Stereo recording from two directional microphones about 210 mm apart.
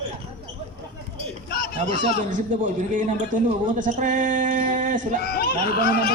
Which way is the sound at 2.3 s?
35° right (ahead or behind).